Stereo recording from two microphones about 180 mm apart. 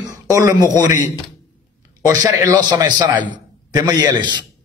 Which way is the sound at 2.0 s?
20° right (ahead or behind).